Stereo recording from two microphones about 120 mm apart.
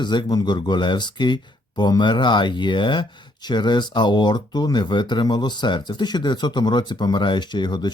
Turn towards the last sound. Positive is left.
turn(degrees=40)  # may be behind; listen again after turning